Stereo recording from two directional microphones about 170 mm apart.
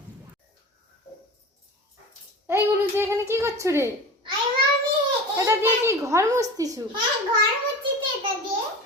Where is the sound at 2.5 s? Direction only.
15° right (ahead or behind).